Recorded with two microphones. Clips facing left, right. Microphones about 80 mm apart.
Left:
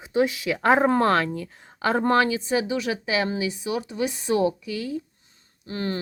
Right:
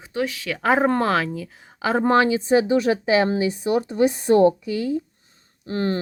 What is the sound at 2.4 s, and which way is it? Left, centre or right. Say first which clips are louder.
A woman's voice: right 7 dB; right.